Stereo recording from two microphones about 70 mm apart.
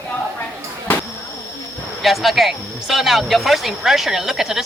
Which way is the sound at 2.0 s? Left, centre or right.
Centre.